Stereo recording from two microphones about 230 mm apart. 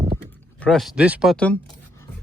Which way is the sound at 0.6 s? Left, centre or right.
Centre.